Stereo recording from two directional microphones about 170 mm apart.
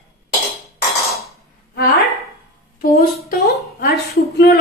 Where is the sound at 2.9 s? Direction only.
65° left (ahead or behind).